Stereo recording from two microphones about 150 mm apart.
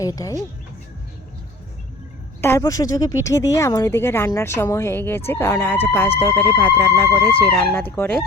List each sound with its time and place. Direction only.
0.0 s speech: 25° left (ahead or behind)
2.4 s speech: 20° left (ahead or behind)